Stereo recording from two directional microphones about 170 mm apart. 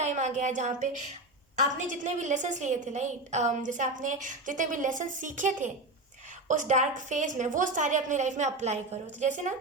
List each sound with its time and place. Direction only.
0.0 s a woman's voice: 45° right (ahead or behind)